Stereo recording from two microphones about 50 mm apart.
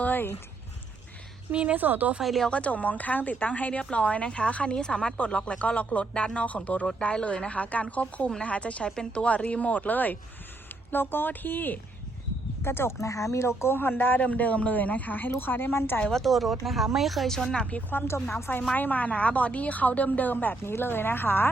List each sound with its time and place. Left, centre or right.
0.0 s a sound: left
1.5 s a woman's voice: right
2.2 s speech: centre
2.5 s a woman's voice: left
12.6 s a woman's voice: left
13.0 s speech: left
13.7 s a woman's voice: left
15.4 s a woman's voice: left
16.2 s speech: centre
17.3 s speech: centre
18.7 s a woman's voice: left